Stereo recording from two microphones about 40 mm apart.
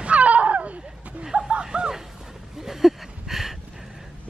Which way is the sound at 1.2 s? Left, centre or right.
Centre.